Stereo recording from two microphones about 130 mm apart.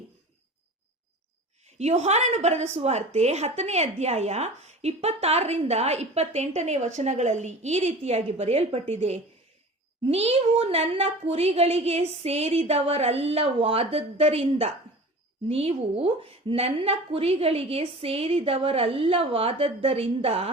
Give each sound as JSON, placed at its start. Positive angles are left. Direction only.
{"t": 1.8, "sound": "a woman's voice", "side_deg": -60}